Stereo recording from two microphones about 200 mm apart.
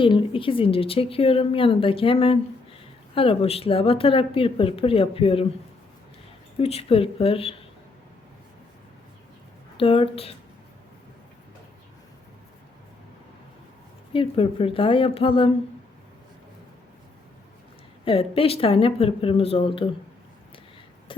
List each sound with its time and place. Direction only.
0.0 s a woman's voice: 25° left (ahead or behind)
6.6 s a woman's voice: 30° left (ahead or behind)
9.7 s a woman's voice: 30° left (ahead or behind)
14.1 s a woman's voice: 25° left (ahead or behind)
18.0 s a woman's voice: 30° left (ahead or behind)
21.1 s a sound: 25° left (ahead or behind)